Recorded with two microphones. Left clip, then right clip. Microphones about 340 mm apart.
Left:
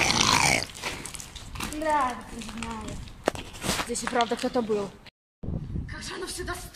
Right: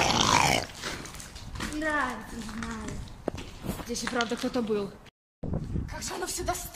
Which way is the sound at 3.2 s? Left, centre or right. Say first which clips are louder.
Left 7 dB; left.